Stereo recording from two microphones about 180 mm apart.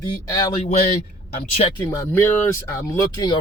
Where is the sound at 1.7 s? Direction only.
15° left (ahead or behind).